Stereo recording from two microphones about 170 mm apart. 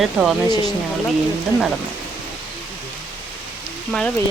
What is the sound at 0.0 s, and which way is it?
Speech, centre (ahead or behind).